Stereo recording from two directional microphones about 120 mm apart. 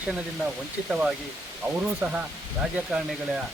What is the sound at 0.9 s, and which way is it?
Speech, 10° right (ahead or behind).